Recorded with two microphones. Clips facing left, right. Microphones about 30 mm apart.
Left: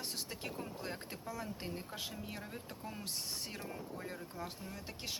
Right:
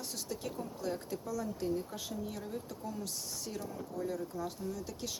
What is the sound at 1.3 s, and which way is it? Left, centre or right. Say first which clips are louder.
Speech: right 7 dB; left.